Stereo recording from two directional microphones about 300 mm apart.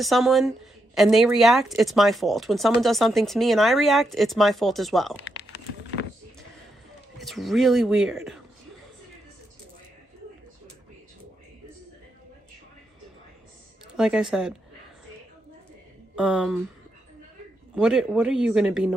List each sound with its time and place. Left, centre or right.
0.0 s speech: centre
5.2 s a sound: left
7.2 s a man's voice: centre
13.9 s speech: centre
16.1 s speech: centre
17.7 s speech: centre